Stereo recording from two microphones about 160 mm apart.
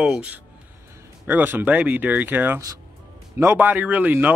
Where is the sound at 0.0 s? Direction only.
5° right (ahead or behind).